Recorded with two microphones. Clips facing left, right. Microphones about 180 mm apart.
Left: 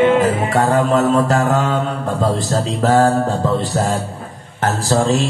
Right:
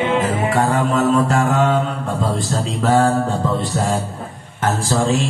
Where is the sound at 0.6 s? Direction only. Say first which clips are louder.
Left 3 dB; 35° left (ahead or behind).